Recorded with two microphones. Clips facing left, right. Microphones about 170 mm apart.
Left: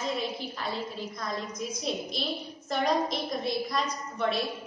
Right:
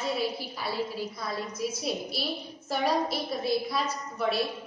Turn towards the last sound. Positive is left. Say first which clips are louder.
# even
turn(degrees=-5)  # may be behind; listen again after turning